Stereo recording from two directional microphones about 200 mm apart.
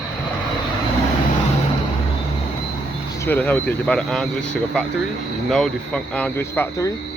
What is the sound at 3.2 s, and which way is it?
Speech, 10° left (ahead or behind).